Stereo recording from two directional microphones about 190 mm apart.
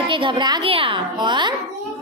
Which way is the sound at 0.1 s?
25° right (ahead or behind).